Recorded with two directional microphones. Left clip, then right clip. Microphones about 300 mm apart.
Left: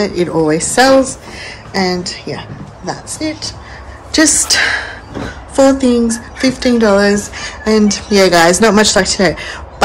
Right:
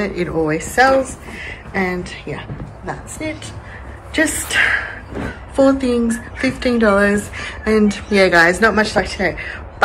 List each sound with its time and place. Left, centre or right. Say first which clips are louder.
0.0 s speech: left 6 dB; centre
1.4 s a sound: left 4 dB; centre
2.9 s speech: left 5 dB; centre